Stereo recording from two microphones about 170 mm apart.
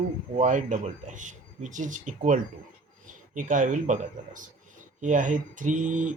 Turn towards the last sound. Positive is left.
turn(degrees=-45)  # may be behind; listen again after turning